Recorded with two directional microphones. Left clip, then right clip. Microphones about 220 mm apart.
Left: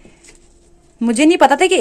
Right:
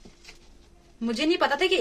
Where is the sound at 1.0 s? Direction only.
45° left (ahead or behind).